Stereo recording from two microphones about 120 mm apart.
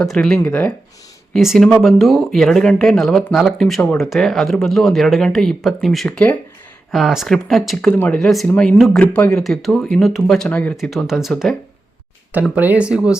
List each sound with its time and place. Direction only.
0.0 s speech: 5° left (ahead or behind)
0.3 s speech: 15° left (ahead or behind)
1.3 s speech: centre (ahead or behind)
6.9 s speech: centre (ahead or behind)
7.8 s speech: 10° left (ahead or behind)
8.2 s speech: centre (ahead or behind)
9.4 s speech: centre (ahead or behind)
10.8 s speech: centre (ahead or behind)
12.3 s speech: 15° right (ahead or behind)